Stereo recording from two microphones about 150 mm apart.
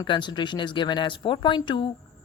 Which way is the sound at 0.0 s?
30° left (ahead or behind).